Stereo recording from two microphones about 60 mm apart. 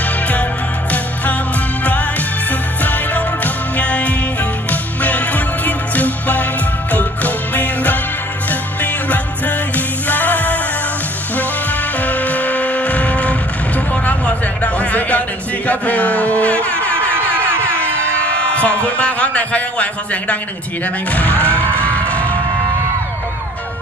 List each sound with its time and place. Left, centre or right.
2.8 s music: left
12.0 s music: left
14.0 s a sound: left
21.1 s music: left